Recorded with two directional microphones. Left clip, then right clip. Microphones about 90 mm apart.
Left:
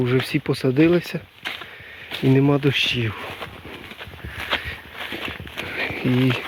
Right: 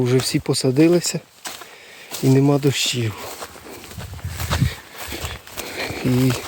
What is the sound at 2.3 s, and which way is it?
Speech, 35° right (ahead or behind).